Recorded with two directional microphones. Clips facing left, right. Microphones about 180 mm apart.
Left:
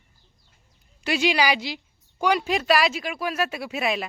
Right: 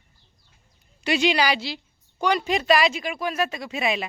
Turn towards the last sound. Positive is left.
turn(degrees=0)  # may be behind; listen again after turning